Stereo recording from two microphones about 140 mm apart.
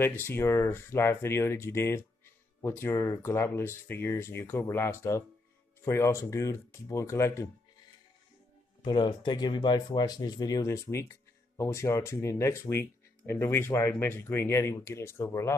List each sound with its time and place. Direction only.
0.0 s speech: 15° left (ahead or behind)
8.8 s speech: 30° left (ahead or behind)